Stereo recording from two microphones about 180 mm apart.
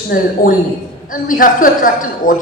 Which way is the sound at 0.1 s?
50° left (ahead or behind).